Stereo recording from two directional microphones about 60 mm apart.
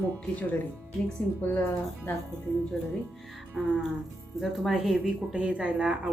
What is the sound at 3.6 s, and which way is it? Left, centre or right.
Speech, centre.